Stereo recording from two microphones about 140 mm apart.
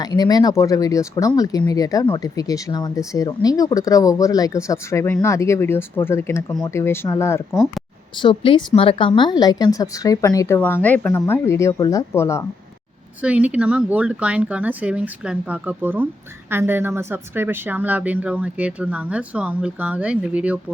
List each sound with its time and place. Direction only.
0.0 s a woman's voice: 30° left (ahead or behind)
8.2 s a woman's voice: 35° left (ahead or behind)
10.6 s a woman's voice: 10° left (ahead or behind)
13.2 s speech: 10° right (ahead or behind)